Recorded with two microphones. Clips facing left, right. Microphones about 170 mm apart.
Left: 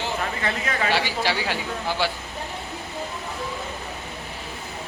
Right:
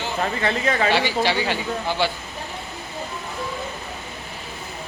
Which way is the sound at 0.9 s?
5° left (ahead or behind).